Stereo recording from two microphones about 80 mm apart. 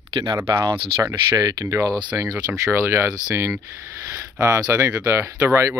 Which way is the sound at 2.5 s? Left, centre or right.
Right.